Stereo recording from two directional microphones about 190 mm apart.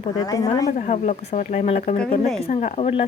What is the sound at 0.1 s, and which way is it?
Speech, 15° left (ahead or behind).